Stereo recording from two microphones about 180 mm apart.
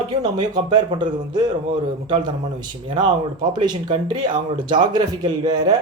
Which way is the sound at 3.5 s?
25° right (ahead or behind).